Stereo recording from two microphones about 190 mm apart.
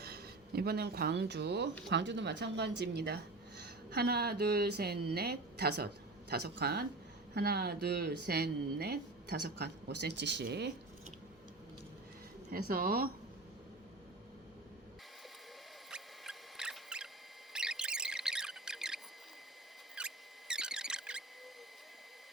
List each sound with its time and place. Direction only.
0.0 s speech: 55° right (ahead or behind)
12.5 s speech: 50° right (ahead or behind)
15.9 s mouse: 5° right (ahead or behind)
17.5 s a sound: 5° right (ahead or behind)
20.0 s mouse: 5° right (ahead or behind)